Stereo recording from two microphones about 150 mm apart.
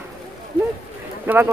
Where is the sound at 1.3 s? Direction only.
15° right (ahead or behind).